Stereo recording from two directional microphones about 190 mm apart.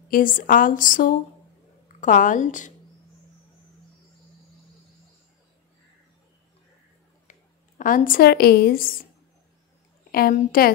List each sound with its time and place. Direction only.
0.1 s a woman's voice: 45° left (ahead or behind)
7.2 s a woman's voice: 45° left (ahead or behind)
10.1 s a woman's voice: 50° left (ahead or behind)